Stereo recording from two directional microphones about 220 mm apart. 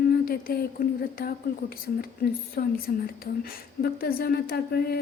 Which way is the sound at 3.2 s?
45° left (ahead or behind).